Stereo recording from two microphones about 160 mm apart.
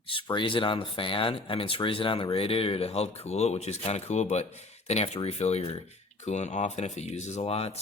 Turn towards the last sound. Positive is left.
turn(degrees=40)  # may be behind; listen again after turning